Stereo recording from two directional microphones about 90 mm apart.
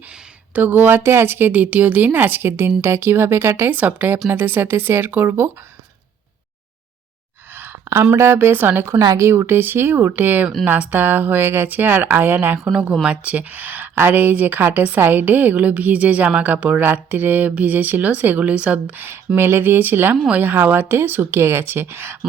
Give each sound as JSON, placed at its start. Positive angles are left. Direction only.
{"t": 0.5, "sound": "speech", "side_deg": -20}
{"t": 7.5, "sound": "a sound", "side_deg": -25}
{"t": 8.1, "sound": "speech", "side_deg": -30}
{"t": 12.5, "sound": "a woman's voice", "side_deg": -5}